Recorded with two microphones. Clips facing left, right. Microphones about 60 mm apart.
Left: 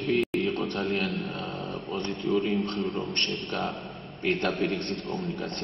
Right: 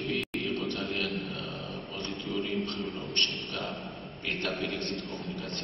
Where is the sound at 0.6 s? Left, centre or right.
Left.